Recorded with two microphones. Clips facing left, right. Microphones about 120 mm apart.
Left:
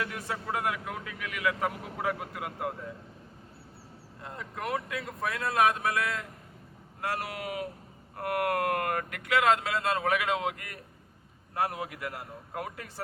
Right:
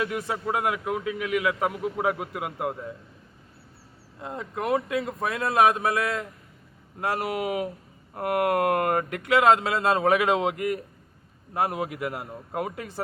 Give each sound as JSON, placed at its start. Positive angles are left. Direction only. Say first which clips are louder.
{"t": 0.0, "sound": "a man's voice", "louder": "right 7 dB", "side_deg": -20}
{"t": 4.2, "sound": "a man's voice", "louder": "right 7 dB", "side_deg": -20}